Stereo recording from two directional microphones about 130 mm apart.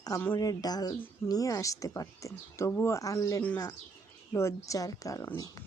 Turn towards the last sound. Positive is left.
turn(degrees=25)  # may be behind; listen again after turning